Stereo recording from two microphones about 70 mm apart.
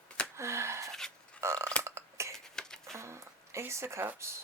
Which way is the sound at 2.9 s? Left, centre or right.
Right.